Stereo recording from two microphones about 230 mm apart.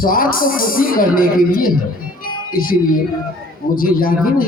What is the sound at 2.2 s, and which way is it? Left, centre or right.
Music, left.